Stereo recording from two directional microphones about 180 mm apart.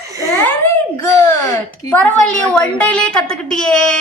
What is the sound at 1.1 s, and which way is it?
A woman's voice, 15° left (ahead or behind).